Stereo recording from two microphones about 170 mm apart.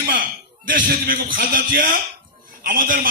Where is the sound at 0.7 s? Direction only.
55° right (ahead or behind).